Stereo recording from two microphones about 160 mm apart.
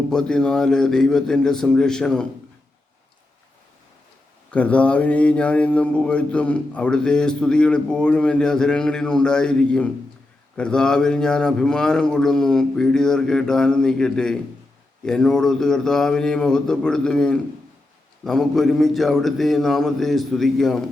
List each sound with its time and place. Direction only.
0.1 s speech: 5° left (ahead or behind)
4.5 s speech: 10° left (ahead or behind)